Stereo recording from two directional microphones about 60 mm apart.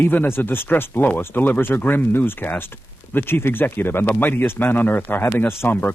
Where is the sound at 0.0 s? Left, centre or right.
Left.